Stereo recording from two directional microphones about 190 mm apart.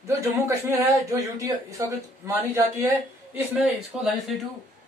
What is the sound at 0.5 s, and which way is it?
Speech, 15° right (ahead or behind).